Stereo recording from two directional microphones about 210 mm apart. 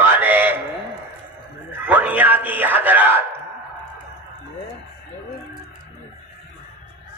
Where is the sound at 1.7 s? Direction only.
10° right (ahead or behind).